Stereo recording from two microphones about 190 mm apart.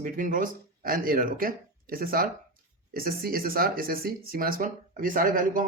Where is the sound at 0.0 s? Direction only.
45° right (ahead or behind).